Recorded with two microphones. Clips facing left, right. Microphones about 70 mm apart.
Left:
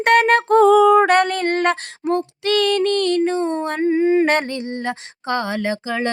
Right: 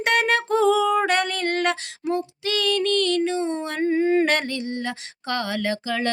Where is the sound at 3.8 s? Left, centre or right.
Centre.